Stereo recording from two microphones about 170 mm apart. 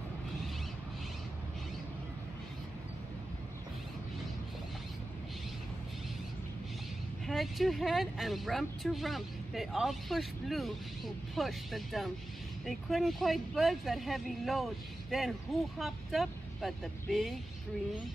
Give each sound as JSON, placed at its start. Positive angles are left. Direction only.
{"t": 7.2, "sound": "speech", "side_deg": 0}